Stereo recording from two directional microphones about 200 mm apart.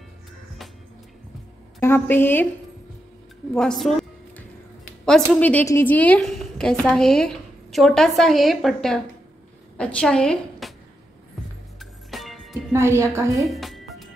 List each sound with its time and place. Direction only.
1.8 s a woman's voice: 10° left (ahead or behind)
3.5 s a woman's voice: centre (ahead or behind)
5.0 s a woman's voice: 5° left (ahead or behind)
11.8 s music: centre (ahead or behind)
12.7 s a woman's voice: 15° right (ahead or behind)
13.4 s music: centre (ahead or behind)